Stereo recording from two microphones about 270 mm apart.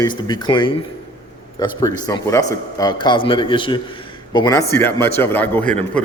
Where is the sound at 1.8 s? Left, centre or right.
Centre.